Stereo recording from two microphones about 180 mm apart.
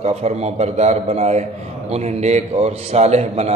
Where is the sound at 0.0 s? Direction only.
35° right (ahead or behind).